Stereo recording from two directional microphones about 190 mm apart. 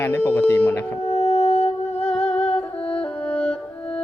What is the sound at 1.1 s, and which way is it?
Music, 35° left (ahead or behind).